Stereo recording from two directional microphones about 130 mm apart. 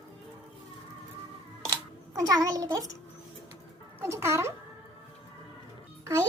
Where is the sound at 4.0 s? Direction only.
20° right (ahead or behind).